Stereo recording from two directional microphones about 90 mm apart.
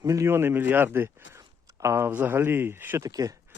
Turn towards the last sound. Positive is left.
turn(degrees=-45)  # may be behind; listen again after turning